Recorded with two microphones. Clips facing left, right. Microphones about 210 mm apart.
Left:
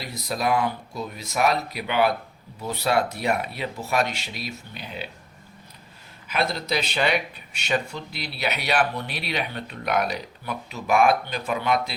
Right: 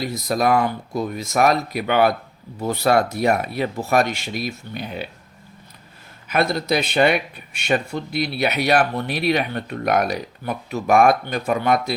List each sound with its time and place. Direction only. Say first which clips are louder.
0.1 s speech: right 4 dB; 45° right (ahead or behind)
6.2 s speech: right 6 dB; 55° right (ahead or behind)